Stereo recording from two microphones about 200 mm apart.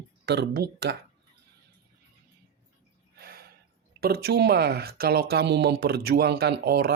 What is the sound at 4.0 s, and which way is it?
Speech, 50° right (ahead or behind).